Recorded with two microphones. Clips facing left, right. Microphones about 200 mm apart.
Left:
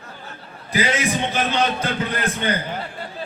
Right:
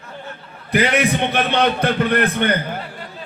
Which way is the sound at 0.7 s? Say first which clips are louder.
Right 4 dB; 60° right (ahead or behind).